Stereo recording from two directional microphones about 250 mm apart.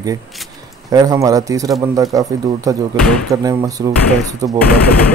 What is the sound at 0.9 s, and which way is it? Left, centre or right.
Speech, centre.